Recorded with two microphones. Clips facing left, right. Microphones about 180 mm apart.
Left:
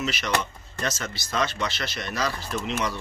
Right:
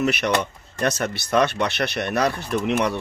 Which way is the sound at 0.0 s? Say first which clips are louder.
Right 6 dB; 60° right (ahead or behind).